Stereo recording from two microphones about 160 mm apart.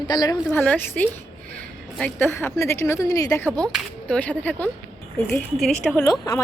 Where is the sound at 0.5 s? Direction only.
10° left (ahead or behind).